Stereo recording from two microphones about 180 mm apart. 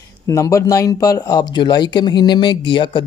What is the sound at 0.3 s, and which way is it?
Speech, 15° left (ahead or behind).